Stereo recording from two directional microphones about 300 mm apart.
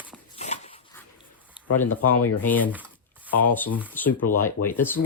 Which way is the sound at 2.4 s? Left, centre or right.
Centre.